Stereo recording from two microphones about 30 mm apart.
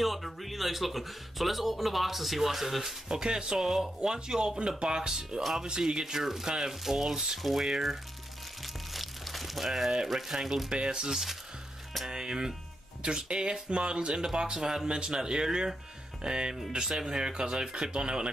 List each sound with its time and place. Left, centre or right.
0.0 s speech: centre
3.2 s speech: right
4.6 s speech: right
4.8 s speech: right
6.7 s speech: centre
7.4 s speech: centre
8.9 s a sound: centre
10.0 s speech: centre
10.7 s speech: right